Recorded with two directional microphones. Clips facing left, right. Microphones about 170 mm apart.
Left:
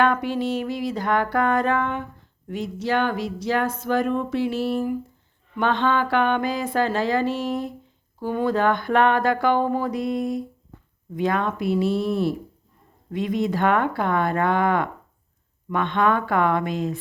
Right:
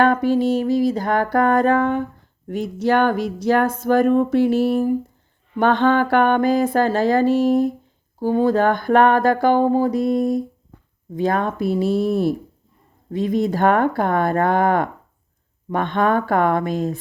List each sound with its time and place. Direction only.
0.0 s speech: 40° right (ahead or behind)